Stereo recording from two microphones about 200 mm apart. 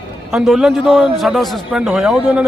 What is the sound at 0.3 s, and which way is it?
A man's voice, centre (ahead or behind).